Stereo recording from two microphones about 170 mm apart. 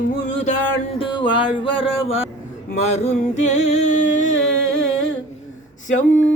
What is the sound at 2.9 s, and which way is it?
Music, 40° left (ahead or behind).